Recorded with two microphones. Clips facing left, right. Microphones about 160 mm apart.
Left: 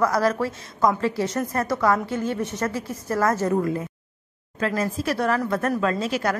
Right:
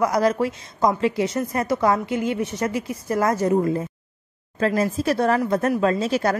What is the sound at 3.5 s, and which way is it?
Speech, 25° right (ahead or behind).